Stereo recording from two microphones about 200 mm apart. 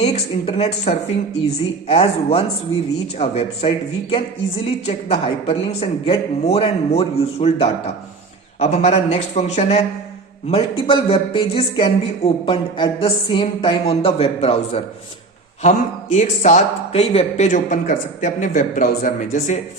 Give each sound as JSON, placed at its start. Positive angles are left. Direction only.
{"t": 0.0, "sound": "speech", "side_deg": 30}